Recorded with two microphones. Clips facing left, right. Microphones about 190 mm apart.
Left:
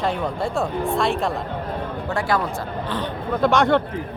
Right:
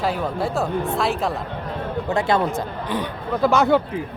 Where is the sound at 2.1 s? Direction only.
20° right (ahead or behind).